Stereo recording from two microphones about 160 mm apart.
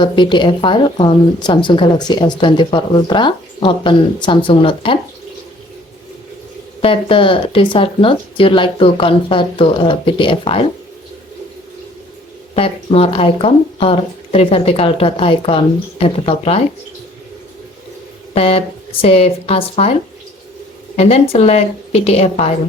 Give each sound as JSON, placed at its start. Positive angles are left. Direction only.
{"t": 0.0, "sound": "speech", "side_deg": 30}
{"t": 6.8, "sound": "speech", "side_deg": 35}
{"t": 12.5, "sound": "speech", "side_deg": 35}
{"t": 18.3, "sound": "speech", "side_deg": 40}
{"t": 20.9, "sound": "speech", "side_deg": 40}